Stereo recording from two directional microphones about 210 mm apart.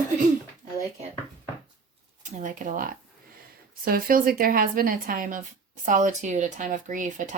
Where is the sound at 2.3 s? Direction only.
35° right (ahead or behind).